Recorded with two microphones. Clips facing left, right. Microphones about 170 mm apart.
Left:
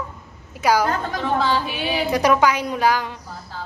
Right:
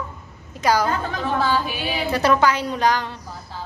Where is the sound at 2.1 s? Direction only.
15° left (ahead or behind).